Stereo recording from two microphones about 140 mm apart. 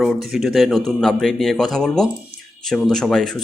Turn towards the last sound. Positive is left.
turn(degrees=5)  # may be behind; listen again after turning